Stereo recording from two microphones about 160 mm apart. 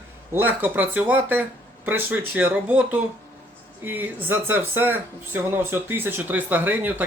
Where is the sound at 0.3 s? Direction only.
10° right (ahead or behind).